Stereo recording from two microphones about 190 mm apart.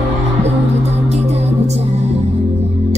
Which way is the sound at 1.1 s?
35° right (ahead or behind).